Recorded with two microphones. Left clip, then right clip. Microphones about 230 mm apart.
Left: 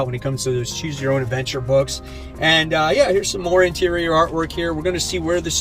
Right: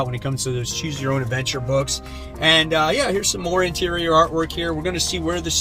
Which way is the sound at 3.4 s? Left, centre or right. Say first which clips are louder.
Left 6 dB; centre.